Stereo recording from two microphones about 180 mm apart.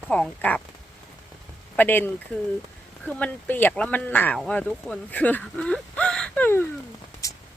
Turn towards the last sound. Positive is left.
turn(degrees=20)  # may be behind; listen again after turning